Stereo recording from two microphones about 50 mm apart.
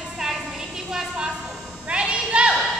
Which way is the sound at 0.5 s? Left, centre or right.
Centre.